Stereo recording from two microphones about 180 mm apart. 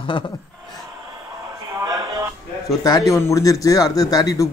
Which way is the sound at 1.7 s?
15° right (ahead or behind).